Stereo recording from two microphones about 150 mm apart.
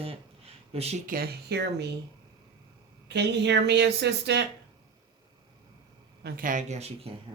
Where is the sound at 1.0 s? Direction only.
80° right.